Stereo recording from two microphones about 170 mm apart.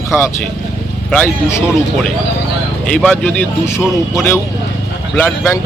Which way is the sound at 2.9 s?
5° left (ahead or behind).